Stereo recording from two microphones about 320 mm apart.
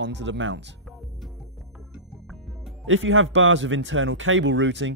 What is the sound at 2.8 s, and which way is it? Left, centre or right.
Speech, right.